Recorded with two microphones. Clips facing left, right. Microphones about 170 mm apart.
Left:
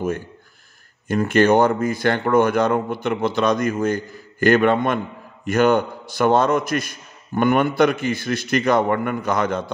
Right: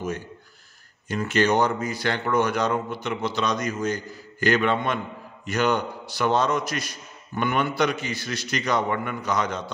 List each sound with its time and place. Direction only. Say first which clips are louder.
1.0 s a man's voice: left 6 dB; 50° left (ahead or behind)